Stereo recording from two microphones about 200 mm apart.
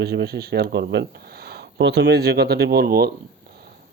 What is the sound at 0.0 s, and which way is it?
Speech, 55° right (ahead or behind).